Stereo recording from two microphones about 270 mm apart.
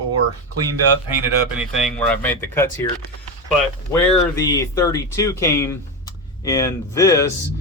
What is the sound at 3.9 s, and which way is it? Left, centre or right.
Speech, centre.